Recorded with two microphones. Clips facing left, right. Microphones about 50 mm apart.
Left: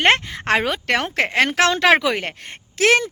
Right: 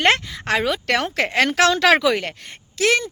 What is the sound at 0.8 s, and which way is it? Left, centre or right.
Speech, left.